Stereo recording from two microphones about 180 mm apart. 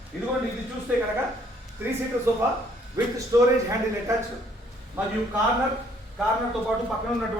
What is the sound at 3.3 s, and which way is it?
Speech, 15° right (ahead or behind).